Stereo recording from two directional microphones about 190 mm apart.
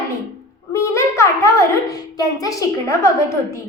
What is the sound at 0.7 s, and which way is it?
A child's voice, 15° left (ahead or behind).